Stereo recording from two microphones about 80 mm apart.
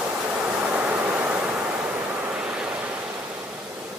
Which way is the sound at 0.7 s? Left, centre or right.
Centre.